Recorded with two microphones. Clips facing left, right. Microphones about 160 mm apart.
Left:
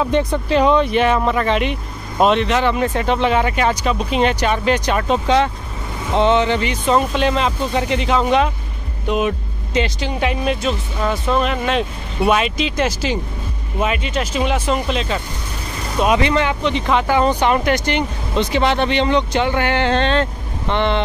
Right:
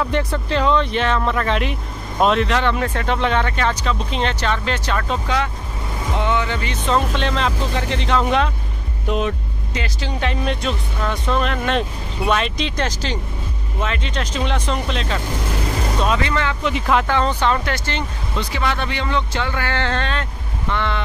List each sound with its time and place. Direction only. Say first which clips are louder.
0.0 s speech: left 4 dB; 20° left (ahead or behind); by 9.3 s 5° left (ahead or behind)
9.8 s speech: left 6 dB; 20° left (ahead or behind)
16.0 s speech: left 6 dB; 15° left (ahead or behind)
16.6 s speech: left 1 dB; centre (ahead or behind)
17.1 s speech: left 3 dB; 15° left (ahead or behind)